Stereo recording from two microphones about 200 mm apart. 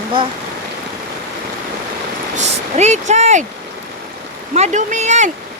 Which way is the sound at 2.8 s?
35° right (ahead or behind).